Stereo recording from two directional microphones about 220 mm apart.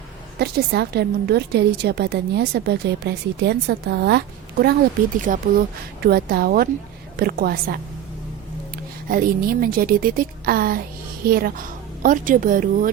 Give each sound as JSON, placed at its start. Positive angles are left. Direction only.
{"t": 0.3, "sound": "a woman's voice", "side_deg": -45}
{"t": 9.0, "sound": "a woman's voice", "side_deg": -40}